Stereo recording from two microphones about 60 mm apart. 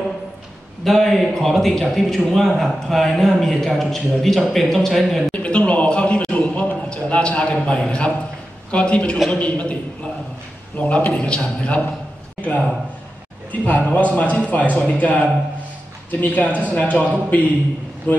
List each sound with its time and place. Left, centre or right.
0.8 s a man's voice: centre
5.3 s a man's voice: centre
10.8 s a man's voice: left
18.1 s a man's voice: left